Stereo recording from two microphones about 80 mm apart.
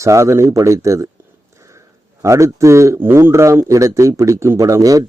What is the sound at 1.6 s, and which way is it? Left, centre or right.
Sniff, right.